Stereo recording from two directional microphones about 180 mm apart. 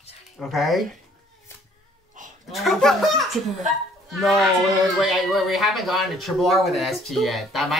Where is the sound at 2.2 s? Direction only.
45° right (ahead or behind).